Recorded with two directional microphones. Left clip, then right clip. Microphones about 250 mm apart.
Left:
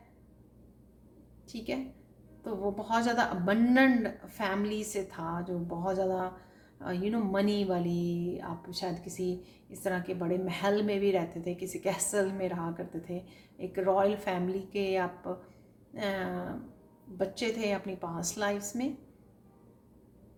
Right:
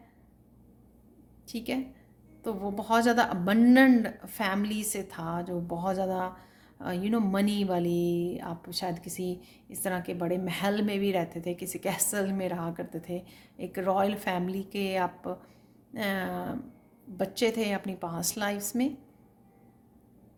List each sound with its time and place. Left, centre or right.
1.5 s speech: right